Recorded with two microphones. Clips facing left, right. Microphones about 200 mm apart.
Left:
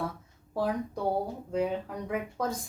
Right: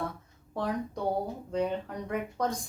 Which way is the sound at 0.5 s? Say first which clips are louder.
Left 2 dB; 5° left (ahead or behind).